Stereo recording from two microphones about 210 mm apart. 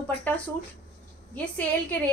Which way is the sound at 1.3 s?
5° left (ahead or behind).